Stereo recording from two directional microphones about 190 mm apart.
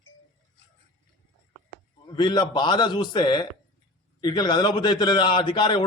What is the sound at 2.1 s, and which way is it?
A man's voice, 25° left (ahead or behind).